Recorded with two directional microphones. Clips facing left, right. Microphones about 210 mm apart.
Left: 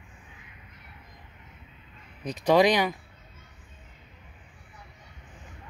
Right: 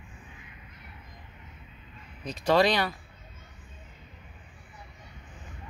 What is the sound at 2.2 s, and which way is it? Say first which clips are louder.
Speech: left 3 dB; 15° left (ahead or behind).